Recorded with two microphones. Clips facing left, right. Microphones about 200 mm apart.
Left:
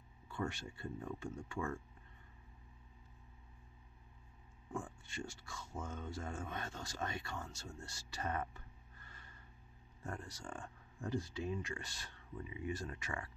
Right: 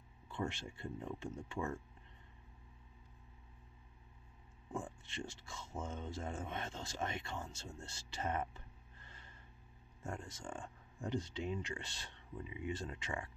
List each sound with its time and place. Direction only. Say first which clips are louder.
0.3 s speech: even; 25° right (ahead or behind)
4.6 s speech: right 1 dB; 15° right (ahead or behind)
10.2 s speech: right 1 dB; 20° right (ahead or behind)